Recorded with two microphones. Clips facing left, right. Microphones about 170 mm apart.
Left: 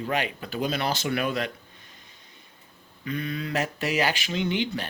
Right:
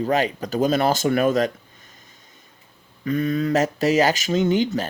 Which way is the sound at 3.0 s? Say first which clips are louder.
Right 9 dB; 45° right (ahead or behind).